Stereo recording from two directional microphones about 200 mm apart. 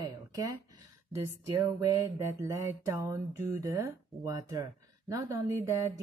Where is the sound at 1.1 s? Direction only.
15° right (ahead or behind).